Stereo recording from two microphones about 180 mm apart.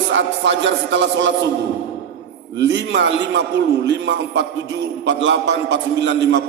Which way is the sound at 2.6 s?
80° right.